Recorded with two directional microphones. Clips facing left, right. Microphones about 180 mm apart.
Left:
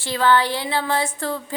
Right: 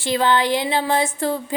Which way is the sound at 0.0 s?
15° right (ahead or behind).